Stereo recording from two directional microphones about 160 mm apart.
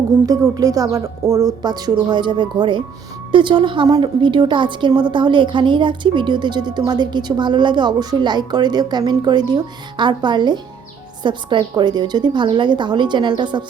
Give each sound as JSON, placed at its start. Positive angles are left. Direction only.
{"t": 0.3, "sound": "a woman's voice", "side_deg": -20}